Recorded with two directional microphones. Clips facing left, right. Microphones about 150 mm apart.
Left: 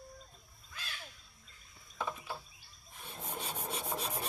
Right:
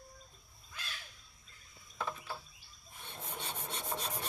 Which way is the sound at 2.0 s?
5° left (ahead or behind).